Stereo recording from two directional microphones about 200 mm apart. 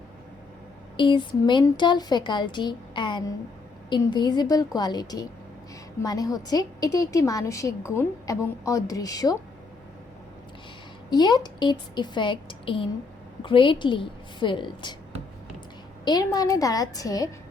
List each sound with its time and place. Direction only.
0.9 s a woman's voice: 25° left (ahead or behind)
11.1 s speech: 20° left (ahead or behind)
16.0 s a woman's voice: 20° left (ahead or behind)